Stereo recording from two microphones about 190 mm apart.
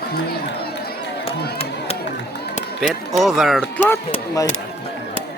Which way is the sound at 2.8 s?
Centre (ahead or behind).